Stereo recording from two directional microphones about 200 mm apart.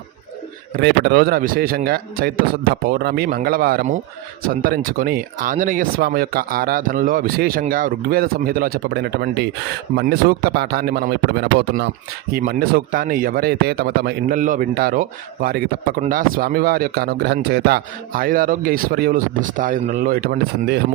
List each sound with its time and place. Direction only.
0.8 s speech: 55° right (ahead or behind)